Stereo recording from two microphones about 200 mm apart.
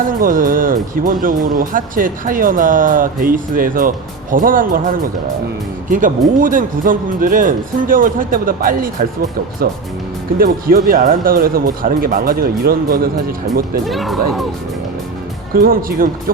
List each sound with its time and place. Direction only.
0.2 s speech: 45° right (ahead or behind)
10.3 s speech: 45° right (ahead or behind)
13.8 s speech: centre (ahead or behind)
15.6 s speech: 45° right (ahead or behind)